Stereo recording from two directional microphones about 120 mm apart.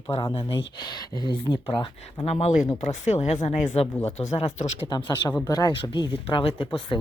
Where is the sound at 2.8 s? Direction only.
75° left (ahead or behind).